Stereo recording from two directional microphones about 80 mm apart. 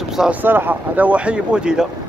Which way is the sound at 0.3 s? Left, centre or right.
Right.